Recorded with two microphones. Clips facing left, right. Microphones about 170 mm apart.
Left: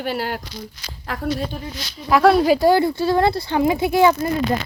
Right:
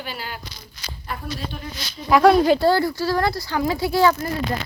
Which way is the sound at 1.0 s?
90° left.